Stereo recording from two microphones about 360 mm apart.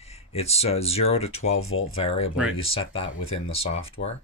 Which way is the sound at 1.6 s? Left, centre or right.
Left.